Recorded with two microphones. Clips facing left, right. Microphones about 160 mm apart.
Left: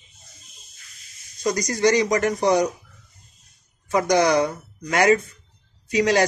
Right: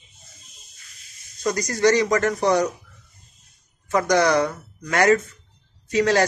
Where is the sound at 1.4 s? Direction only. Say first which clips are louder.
Right 1 dB; 15° left (ahead or behind).